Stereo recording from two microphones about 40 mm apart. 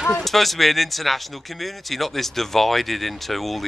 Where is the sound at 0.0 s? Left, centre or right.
Centre.